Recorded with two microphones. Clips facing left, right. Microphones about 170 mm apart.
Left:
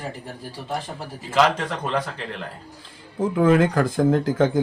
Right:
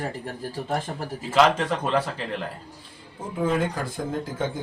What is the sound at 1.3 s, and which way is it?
Speech, centre (ahead or behind).